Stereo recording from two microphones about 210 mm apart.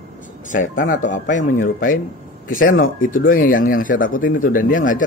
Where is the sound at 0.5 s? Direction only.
40° left (ahead or behind).